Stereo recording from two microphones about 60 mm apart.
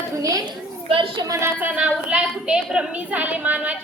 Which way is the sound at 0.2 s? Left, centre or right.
Right.